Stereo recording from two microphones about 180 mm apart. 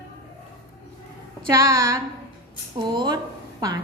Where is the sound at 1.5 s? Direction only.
20° right (ahead or behind).